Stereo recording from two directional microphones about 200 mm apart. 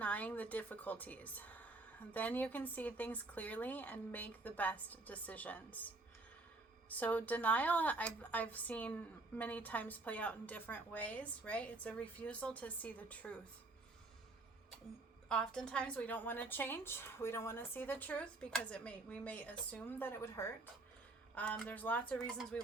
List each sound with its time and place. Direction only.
0.0 s a woman's voice: 10° left (ahead or behind)
15.3 s a woman's voice: 5° left (ahead or behind)